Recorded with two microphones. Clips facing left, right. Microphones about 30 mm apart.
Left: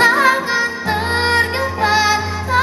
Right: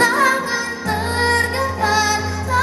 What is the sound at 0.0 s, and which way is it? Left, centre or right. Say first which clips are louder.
Music: left 3 dB; left.